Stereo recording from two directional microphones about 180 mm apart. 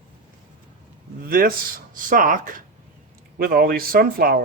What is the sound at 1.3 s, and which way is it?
Speech, 55° right (ahead or behind).